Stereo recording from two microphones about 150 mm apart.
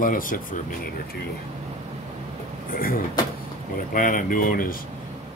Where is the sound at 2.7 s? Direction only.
75° left (ahead or behind).